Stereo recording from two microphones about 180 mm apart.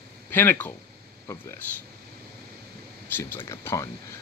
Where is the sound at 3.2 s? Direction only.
15° left (ahead or behind).